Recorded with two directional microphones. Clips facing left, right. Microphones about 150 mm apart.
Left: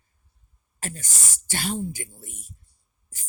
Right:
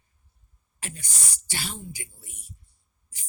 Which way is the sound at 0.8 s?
45° left (ahead or behind).